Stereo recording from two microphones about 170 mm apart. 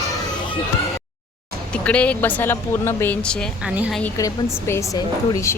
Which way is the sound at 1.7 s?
5° left (ahead or behind).